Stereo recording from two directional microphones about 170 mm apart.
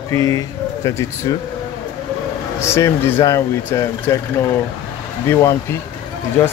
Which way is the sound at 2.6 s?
15° left (ahead or behind).